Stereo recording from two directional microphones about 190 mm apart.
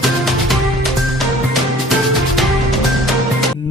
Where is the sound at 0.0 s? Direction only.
Centre (ahead or behind).